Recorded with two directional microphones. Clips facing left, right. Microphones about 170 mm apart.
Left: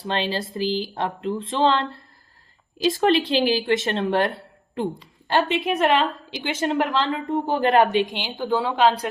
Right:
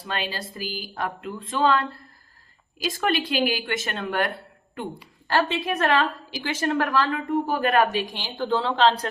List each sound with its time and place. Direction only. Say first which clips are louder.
0.1 s a woman's voice: left 5 dB; 25° left (ahead or behind)
3.0 s a woman's voice: left 3 dB; 25° left (ahead or behind)
4.4 s a sound: left 7 dB; 30° left (ahead or behind)
5.3 s a woman's voice: left 2 dB; 20° left (ahead or behind)